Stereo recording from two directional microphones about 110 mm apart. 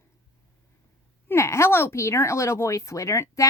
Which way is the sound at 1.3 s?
25° left (ahead or behind).